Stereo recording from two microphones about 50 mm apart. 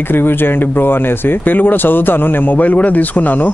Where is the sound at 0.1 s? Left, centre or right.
Left.